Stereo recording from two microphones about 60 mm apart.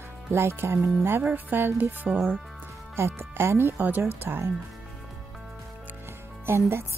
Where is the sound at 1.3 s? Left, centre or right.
Right.